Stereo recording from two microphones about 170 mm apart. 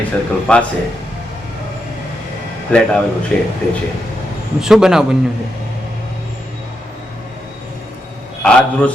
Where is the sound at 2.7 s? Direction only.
5° left (ahead or behind).